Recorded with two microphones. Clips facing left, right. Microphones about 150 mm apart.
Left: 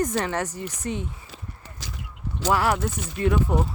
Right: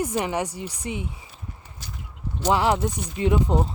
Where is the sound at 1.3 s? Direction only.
90° left.